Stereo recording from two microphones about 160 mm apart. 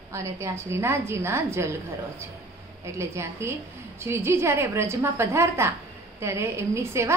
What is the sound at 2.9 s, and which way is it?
A woman's voice, 15° right (ahead or behind).